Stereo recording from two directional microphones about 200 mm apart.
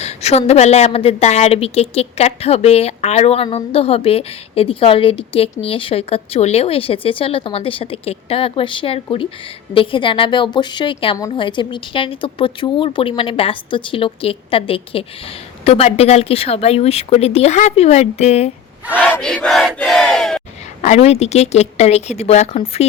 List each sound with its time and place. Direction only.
0.0 s a woman's voice: 30° left (ahead or behind)
18.9 s battle cry: 5° left (ahead or behind)
20.8 s speech: 35° left (ahead or behind)